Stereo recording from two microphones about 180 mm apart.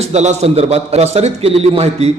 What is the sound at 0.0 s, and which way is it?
A man's voice, 40° right (ahead or behind).